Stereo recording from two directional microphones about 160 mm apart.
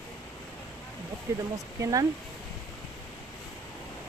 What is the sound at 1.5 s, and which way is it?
Speech, 20° right (ahead or behind).